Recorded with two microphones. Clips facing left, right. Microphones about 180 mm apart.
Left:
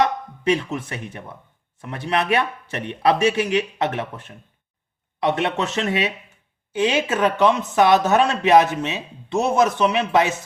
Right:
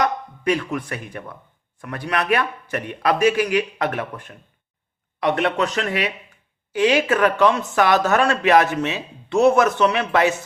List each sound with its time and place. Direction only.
0.0 s speech: 25° left (ahead or behind)